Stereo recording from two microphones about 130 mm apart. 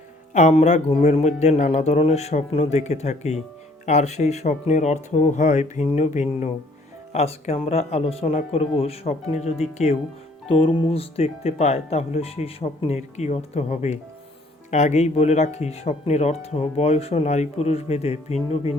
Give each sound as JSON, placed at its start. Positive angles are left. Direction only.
{"t": 0.3, "sound": "speech", "side_deg": 65}
{"t": 7.1, "sound": "speech", "side_deg": 55}
{"t": 10.5, "sound": "speech", "side_deg": 45}